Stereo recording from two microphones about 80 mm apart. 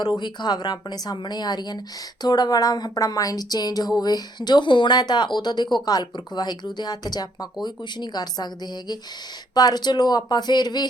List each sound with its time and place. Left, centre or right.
0.0 s speech: left
9.6 s speech: left